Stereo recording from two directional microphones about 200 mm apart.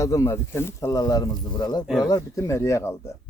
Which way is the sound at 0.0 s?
15° left (ahead or behind).